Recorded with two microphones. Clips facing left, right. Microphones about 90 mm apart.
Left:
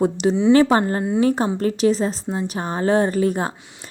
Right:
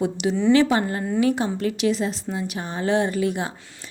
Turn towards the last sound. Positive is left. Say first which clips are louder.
# left 4 dB
turn(degrees=40)  # may be behind; listen again after turning